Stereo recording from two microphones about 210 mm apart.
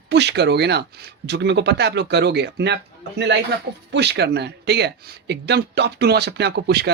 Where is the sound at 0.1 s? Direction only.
55° right (ahead or behind).